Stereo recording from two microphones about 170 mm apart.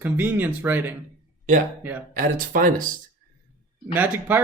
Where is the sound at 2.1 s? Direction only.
55° right (ahead or behind).